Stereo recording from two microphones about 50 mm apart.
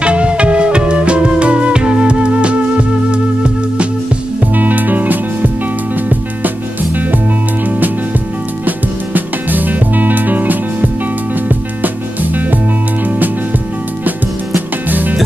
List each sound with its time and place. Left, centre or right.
0.0 s music: right
4.4 s music: right
8.6 s music: right
14.9 s music: right